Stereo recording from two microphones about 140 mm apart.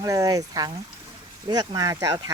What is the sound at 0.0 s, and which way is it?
Speech, 25° right (ahead or behind).